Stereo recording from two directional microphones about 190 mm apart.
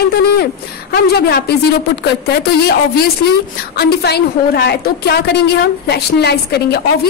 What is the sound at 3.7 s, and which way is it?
A woman's voice, 55° left (ahead or behind).